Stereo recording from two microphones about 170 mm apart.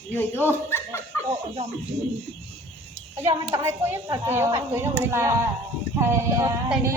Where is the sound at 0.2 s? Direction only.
10° left (ahead or behind).